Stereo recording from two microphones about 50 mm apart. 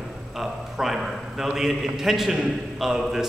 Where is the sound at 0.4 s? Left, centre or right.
Centre.